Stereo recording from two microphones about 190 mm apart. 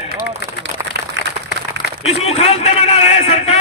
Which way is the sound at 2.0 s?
30° left (ahead or behind).